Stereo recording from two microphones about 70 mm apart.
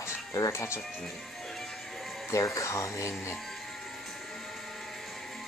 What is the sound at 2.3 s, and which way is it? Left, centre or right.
Speech, left.